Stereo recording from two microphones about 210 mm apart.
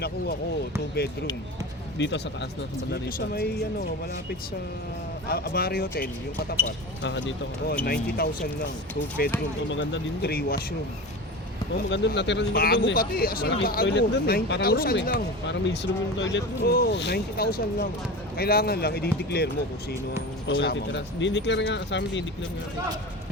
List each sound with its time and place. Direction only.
2.0 s speech: 55° left (ahead or behind)
5.3 s speech: 45° left (ahead or behind)
7.0 s speech: 55° left (ahead or behind)
9.6 s speech: 60° left (ahead or behind)
11.9 s speech: 55° left (ahead or behind)
20.5 s speech: 50° left (ahead or behind)